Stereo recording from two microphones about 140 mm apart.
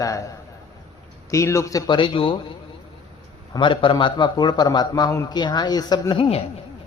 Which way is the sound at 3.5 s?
35° left (ahead or behind).